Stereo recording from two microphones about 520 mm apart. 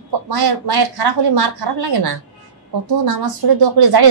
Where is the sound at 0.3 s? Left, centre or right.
Right.